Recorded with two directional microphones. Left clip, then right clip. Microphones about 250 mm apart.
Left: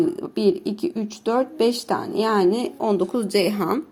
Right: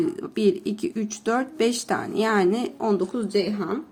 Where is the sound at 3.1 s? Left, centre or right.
Left.